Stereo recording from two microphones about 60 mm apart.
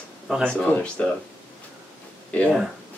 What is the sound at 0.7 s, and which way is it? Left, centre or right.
Speech, left.